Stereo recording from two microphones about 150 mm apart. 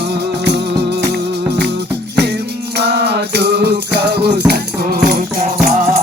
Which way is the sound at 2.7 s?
90° right.